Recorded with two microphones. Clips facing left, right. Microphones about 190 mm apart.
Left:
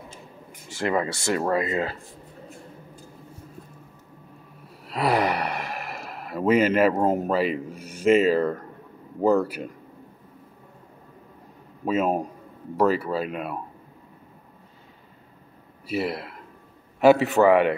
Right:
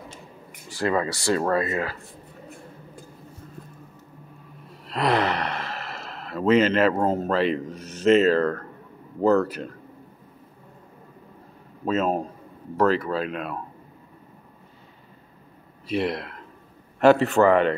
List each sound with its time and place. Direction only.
0.7 s speech: 20° left (ahead or behind)
4.8 s speech: 10° left (ahead or behind)
11.8 s speech: 10° left (ahead or behind)
15.9 s speech: 5° left (ahead or behind)